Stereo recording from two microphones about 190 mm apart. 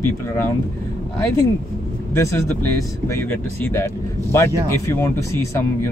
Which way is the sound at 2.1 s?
15° left (ahead or behind).